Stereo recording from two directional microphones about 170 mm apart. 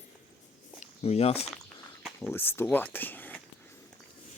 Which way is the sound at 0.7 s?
40° left (ahead or behind).